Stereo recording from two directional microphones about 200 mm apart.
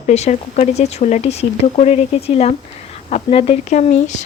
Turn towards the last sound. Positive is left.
turn(degrees=35)  # may be behind; listen again after turning